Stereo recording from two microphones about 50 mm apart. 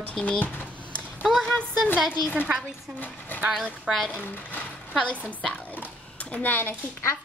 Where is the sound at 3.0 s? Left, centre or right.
Left.